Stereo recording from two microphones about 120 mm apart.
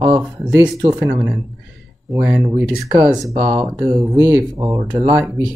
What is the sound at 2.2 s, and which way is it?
Speech, 10° right (ahead or behind).